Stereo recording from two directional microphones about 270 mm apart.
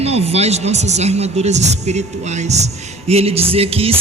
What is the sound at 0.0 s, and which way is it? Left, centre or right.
Music, right.